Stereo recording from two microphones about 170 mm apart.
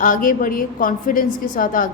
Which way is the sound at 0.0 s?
50° left (ahead or behind).